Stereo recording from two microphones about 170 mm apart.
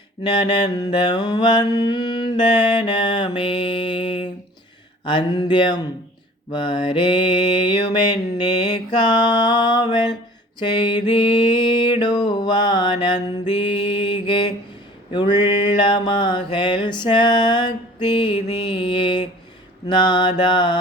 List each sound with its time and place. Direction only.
0.2 s mantra: 25° left (ahead or behind)